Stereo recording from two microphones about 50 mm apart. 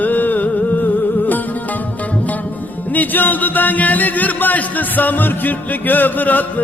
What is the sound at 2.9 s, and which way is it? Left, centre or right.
Speech, left.